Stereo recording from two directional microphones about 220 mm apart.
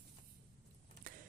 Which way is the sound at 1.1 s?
40° right (ahead or behind).